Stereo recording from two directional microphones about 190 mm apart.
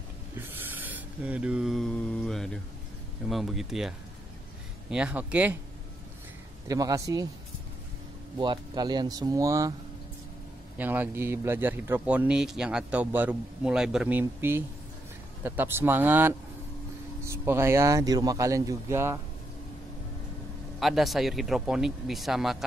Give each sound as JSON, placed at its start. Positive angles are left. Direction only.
{"t": 0.5, "sound": "a sound", "side_deg": -10}
{"t": 3.3, "sound": "speech", "side_deg": 0}
{"t": 6.7, "sound": "speech", "side_deg": -20}
{"t": 8.4, "sound": "speech", "side_deg": -25}
{"t": 10.8, "sound": "speech", "side_deg": -10}
{"t": 20.8, "sound": "speech", "side_deg": 0}